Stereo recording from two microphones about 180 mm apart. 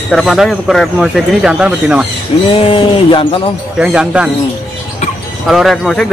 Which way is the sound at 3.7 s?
5° right (ahead or behind).